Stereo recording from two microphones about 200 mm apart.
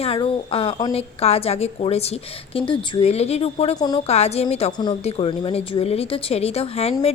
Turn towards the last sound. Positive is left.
turn(degrees=30)  # may be behind; listen again after turning